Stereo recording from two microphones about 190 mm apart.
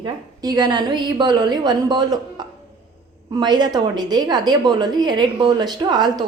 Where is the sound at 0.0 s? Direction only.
20° right (ahead or behind).